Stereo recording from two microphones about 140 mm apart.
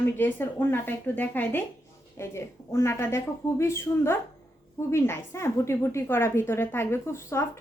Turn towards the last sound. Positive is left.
turn(degrees=20)  # may be behind; listen again after turning